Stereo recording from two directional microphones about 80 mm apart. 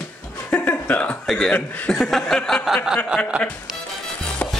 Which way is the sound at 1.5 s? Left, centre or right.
Left.